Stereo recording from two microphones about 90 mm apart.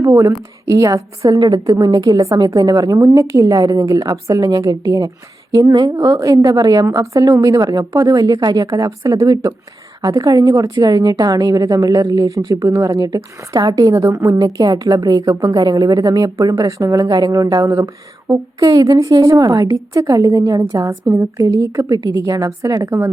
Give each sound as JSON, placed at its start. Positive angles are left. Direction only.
{"t": 0.1, "sound": "a woman's voice", "side_deg": -30}